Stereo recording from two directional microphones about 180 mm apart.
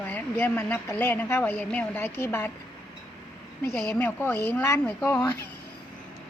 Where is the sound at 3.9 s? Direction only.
10° left (ahead or behind).